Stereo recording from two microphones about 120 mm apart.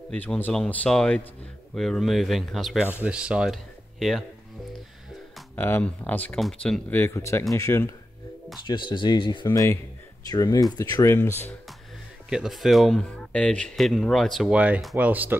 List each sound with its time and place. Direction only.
0.1 s speech: 10° left (ahead or behind)
2.9 s speech: 10° right (ahead or behind)
5.6 s speech: 15° left (ahead or behind)
6.9 s speech: 20° left (ahead or behind)
8.6 s speech: 40° left (ahead or behind)
9.5 s speech: 20° left (ahead or behind)
12.3 s speech: 5° right (ahead or behind)
14.5 s speech: 10° right (ahead or behind)